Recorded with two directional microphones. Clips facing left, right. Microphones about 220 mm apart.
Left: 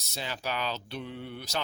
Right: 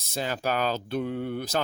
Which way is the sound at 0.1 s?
50° right (ahead or behind).